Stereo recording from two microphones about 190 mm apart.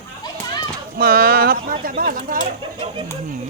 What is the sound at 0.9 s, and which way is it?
Speech, 50° right (ahead or behind).